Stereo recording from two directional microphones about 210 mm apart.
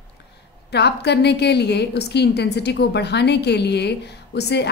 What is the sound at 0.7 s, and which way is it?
A woman's voice, 50° left (ahead or behind).